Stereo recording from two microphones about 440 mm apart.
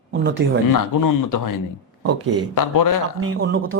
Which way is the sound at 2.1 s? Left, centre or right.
Right.